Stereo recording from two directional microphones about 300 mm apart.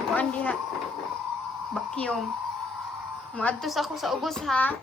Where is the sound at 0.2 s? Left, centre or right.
Centre.